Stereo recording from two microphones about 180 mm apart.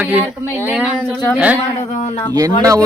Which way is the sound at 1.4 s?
5° right (ahead or behind).